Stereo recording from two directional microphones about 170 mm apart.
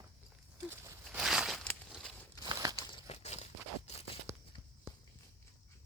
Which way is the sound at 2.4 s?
20° right (ahead or behind).